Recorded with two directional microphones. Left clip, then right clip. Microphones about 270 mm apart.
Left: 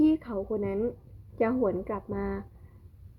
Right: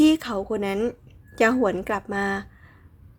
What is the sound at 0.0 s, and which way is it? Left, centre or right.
A woman's voice, centre.